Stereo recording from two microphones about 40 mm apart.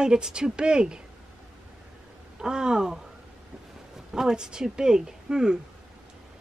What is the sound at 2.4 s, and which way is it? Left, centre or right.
Speech, centre.